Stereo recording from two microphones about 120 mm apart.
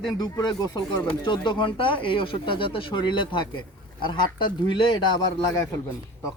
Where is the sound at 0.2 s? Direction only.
35° left (ahead or behind).